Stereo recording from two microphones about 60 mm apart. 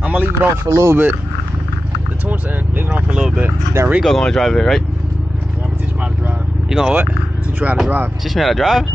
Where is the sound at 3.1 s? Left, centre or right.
Centre.